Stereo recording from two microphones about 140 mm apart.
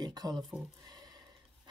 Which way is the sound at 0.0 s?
30° right (ahead or behind).